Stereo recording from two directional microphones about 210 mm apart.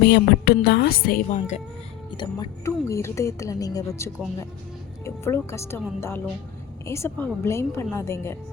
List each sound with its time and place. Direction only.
0.0 s a woman's voice: 50° left (ahead or behind); by 1.6 s 35° left (ahead or behind)
2.0 s a woman's voice: 20° left (ahead or behind)